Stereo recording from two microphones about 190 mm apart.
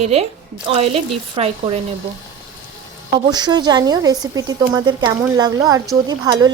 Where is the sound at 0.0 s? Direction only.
30° right (ahead or behind).